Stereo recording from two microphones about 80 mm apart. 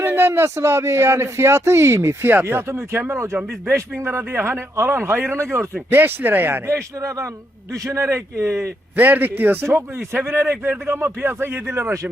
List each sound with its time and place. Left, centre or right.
0.0 s speech: right
7.7 s speech: right
9.0 s speech: right